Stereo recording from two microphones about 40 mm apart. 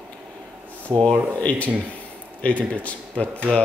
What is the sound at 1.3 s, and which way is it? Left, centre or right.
Speech, left.